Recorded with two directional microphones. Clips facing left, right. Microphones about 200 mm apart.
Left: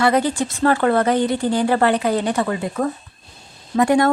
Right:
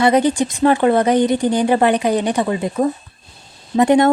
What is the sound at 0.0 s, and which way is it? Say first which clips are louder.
Speech: right 3 dB; 20° right (ahead or behind).